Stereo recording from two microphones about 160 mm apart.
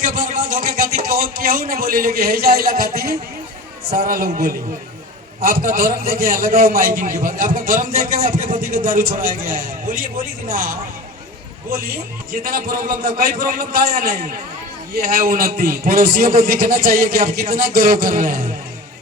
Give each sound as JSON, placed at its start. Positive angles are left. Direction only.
{"t": 0.0, "sound": "a man's voice", "side_deg": -60}